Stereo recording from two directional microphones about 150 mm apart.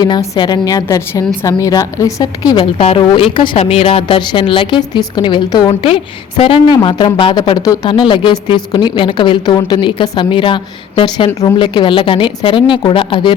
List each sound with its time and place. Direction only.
0.0 s a woman's voice: 30° left (ahead or behind)
2.8 s a woman's voice: 40° left (ahead or behind)